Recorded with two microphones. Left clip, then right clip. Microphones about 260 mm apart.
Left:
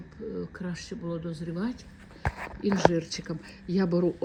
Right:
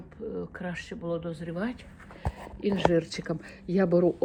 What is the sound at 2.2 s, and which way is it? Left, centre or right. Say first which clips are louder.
Speech: left 1 dB; right.